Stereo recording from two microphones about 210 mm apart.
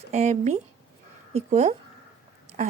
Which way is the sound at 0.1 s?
35° right (ahead or behind).